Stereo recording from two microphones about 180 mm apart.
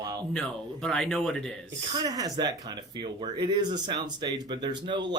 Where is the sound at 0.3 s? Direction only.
5° left (ahead or behind).